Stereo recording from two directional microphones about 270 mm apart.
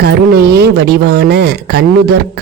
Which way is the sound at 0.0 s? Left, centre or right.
Right.